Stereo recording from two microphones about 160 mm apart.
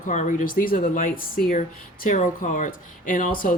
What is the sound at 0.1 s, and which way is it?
Speech, 50° left (ahead or behind).